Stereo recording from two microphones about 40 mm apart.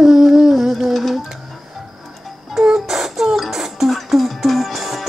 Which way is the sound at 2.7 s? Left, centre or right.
Centre.